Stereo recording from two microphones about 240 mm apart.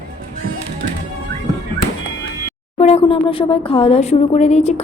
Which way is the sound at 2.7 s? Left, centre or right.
Left.